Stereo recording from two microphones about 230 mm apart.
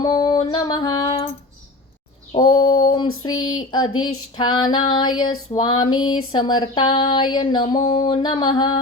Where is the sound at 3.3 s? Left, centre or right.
Left.